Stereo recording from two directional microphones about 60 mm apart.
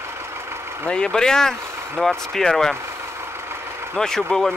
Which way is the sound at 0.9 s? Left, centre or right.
Centre.